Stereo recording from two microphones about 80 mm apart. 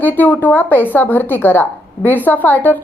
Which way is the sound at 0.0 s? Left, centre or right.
Left.